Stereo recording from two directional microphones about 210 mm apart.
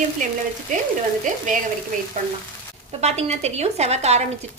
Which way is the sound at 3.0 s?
30° right (ahead or behind).